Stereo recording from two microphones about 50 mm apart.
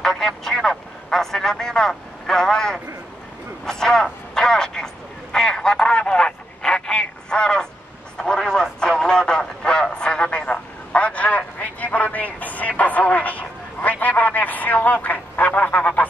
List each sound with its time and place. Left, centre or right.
0.0 s speech: centre
8.2 s vehicle: centre
8.7 s a sound: centre